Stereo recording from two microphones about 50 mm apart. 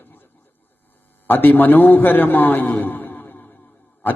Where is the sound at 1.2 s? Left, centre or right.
Left.